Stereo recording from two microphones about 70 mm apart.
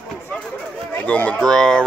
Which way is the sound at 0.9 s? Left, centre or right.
Left.